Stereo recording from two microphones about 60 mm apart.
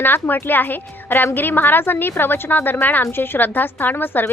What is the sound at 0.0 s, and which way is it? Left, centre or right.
A woman's voice, left.